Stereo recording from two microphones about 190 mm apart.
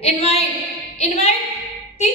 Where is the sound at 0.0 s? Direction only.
35° left (ahead or behind).